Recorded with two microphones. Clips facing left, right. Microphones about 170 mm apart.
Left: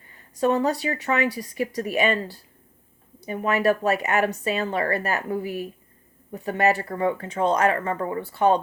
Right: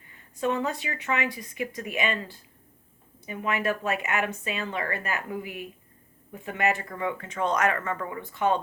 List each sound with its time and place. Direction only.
0.1 s speech: 40° left (ahead or behind)